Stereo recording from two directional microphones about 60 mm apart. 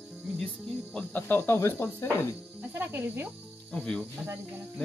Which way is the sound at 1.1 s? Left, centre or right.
Left.